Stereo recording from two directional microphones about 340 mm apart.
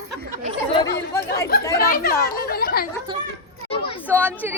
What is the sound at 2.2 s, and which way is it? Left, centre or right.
Chatter, left.